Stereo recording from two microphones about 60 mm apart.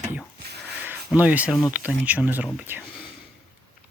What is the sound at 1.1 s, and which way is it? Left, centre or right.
Speech, right.